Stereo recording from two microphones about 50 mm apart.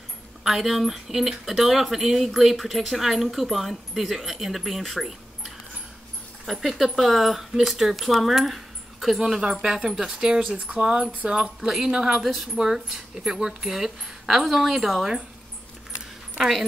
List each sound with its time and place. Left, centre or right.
0.4 s speech: centre
9.2 s speech: centre
12.2 s speech: centre
16.3 s speech: centre